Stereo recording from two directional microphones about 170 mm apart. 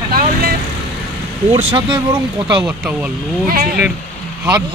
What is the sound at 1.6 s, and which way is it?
Speech, 30° right (ahead or behind).